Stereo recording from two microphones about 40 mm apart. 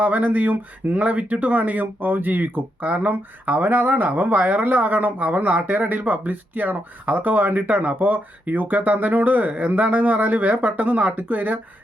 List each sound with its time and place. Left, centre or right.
0.0 s speech: right